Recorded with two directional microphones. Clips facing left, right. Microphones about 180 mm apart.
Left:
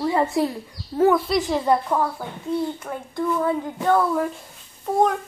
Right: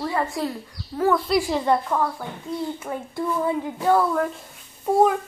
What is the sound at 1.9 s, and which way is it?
Speech, 10° left (ahead or behind).